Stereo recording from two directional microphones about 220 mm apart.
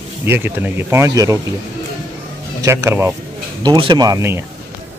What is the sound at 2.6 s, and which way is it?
Speech, 10° right (ahead or behind).